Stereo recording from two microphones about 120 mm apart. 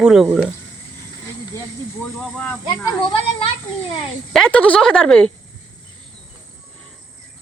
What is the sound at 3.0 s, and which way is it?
Speech, 45° left (ahead or behind).